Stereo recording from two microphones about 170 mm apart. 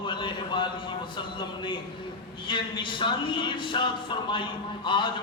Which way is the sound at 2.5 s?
30° left (ahead or behind).